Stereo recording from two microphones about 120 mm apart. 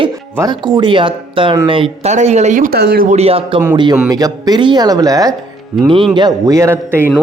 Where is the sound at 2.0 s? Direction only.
70° right (ahead or behind); by 3.2 s 90° right.